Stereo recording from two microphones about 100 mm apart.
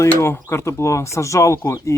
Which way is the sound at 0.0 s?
30° left (ahead or behind).